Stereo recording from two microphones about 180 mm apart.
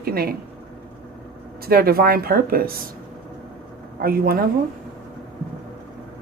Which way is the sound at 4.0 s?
55° right (ahead or behind).